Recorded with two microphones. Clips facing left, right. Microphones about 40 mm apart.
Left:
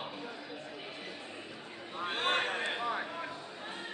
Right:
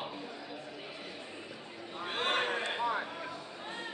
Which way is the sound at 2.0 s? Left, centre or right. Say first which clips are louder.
Even; centre.